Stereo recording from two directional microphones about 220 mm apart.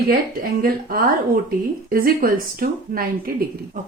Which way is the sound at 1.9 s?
40° right (ahead or behind).